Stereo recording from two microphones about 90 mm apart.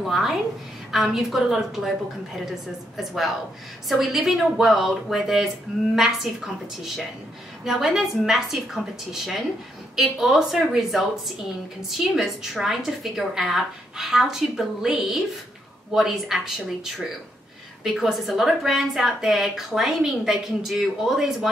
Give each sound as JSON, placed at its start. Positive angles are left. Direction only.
{"t": 0.0, "sound": "a woman's voice", "side_deg": 0}